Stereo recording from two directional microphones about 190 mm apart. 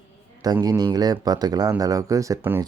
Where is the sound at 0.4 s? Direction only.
20° right (ahead or behind).